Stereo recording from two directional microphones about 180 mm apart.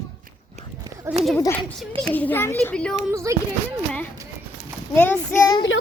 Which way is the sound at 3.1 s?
15° right (ahead or behind).